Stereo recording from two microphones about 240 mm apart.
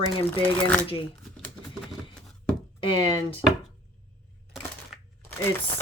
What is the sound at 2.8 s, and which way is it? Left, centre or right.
Speech, left.